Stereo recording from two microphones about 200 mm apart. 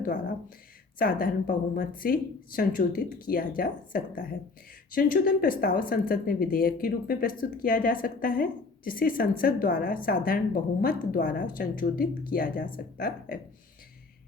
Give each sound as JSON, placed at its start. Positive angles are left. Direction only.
{"t": 0.0, "sound": "a woman's voice", "side_deg": 45}